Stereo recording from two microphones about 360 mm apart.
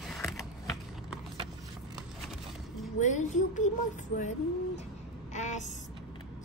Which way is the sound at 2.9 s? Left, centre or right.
Centre.